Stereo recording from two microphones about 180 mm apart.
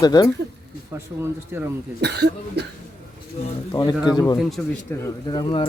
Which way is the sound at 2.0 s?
70° right (ahead or behind).